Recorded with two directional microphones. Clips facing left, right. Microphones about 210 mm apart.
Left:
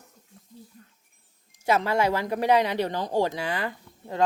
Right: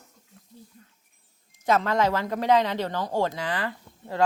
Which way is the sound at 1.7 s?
10° left (ahead or behind).